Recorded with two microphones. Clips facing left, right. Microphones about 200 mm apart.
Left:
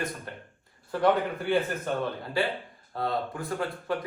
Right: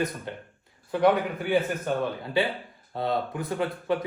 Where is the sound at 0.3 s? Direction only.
25° right (ahead or behind).